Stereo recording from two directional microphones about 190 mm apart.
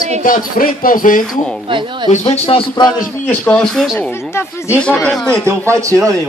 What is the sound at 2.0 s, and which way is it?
Speech, 35° left (ahead or behind).